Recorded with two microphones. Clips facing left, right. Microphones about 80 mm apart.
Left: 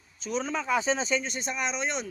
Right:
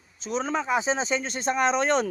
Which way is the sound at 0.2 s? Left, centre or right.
Right.